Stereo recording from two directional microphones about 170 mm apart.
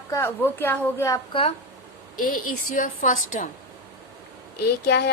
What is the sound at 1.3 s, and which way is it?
Speech, 35° left (ahead or behind).